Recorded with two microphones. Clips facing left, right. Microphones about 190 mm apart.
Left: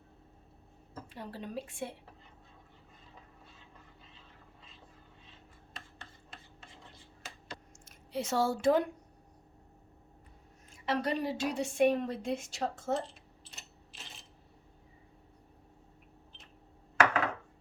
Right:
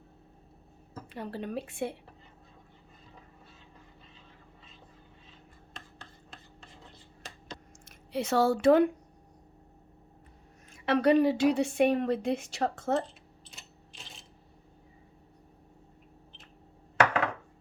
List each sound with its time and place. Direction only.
1.1 s a woman's voice: 65° right (ahead or behind)
5.7 s a sound: centre (ahead or behind)
7.9 s speech: 65° right (ahead or behind)
10.7 s a woman's voice: 65° right (ahead or behind)
13.5 s coin: centre (ahead or behind)